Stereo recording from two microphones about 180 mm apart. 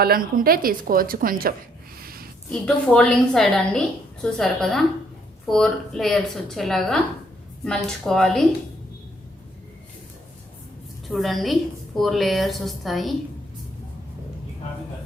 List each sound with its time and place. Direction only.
0.0 s a woman's voice: 55° right (ahead or behind)
2.0 s a sound: 55° right (ahead or behind)
2.5 s a woman's voice: 5° left (ahead or behind)
11.1 s a woman's voice: centre (ahead or behind)